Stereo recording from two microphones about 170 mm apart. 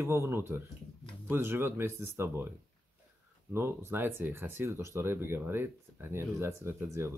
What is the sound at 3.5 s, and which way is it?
Speech, 15° right (ahead or behind).